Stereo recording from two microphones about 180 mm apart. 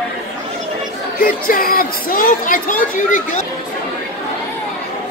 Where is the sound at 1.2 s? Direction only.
55° left (ahead or behind).